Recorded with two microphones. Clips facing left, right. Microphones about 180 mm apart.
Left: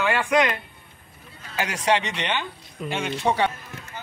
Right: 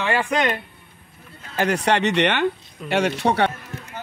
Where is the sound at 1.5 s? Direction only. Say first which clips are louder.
Right 3 dB; 55° right (ahead or behind).